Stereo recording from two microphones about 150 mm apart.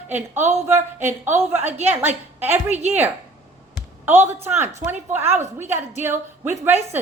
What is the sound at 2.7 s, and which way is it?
Speech, 50° right (ahead or behind).